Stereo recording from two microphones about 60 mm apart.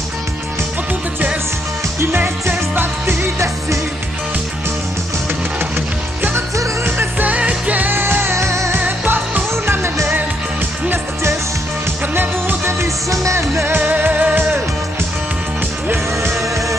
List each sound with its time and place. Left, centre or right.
2.0 s music: right
5.6 s music: right
7.2 s music: right
8.7 s music: right
9.5 s music: right
12.1 s music: right
12.6 s music: right
13.7 s music: right
15.9 s music: right